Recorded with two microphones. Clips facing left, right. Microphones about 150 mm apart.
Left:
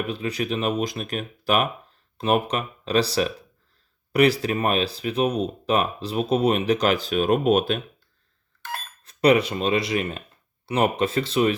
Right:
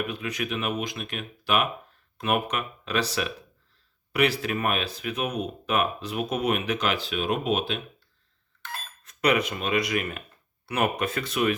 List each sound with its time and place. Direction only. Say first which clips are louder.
0.1 s speech: left 4 dB; 30° left (ahead or behind)
9.0 s speech: left 6 dB; 30° left (ahead or behind)